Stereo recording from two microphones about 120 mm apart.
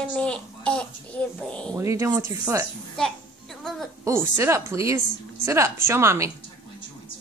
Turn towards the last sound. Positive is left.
turn(degrees=-25)  # may be behind; listen again after turning